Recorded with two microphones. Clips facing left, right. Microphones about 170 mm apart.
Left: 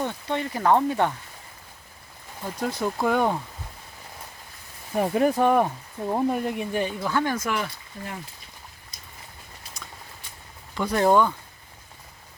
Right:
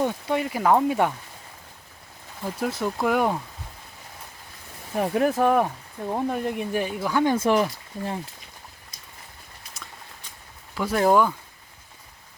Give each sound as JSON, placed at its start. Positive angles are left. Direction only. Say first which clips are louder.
{"t": 0.0, "sound": "speech", "louder": "right 3 dB", "side_deg": -10}
{"t": 2.4, "sound": "speech", "louder": "right 1 dB", "side_deg": -5}
{"t": 4.9, "sound": "speech", "louder": "left 1 dB", "side_deg": 0}
{"t": 7.3, "sound": "speech", "louder": "right 7 dB", "side_deg": -30}
{"t": 10.8, "sound": "speech", "louder": "even", "side_deg": -5}